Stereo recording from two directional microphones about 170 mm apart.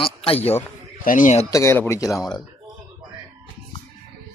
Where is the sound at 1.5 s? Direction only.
15° left (ahead or behind).